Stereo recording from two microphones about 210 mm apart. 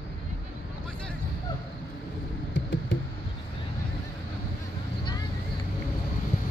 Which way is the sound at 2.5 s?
60° left (ahead or behind).